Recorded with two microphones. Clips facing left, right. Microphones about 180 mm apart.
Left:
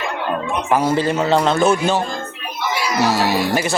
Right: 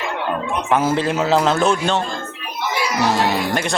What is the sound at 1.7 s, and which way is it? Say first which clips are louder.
Speech: left 2 dB; 10° left (ahead or behind).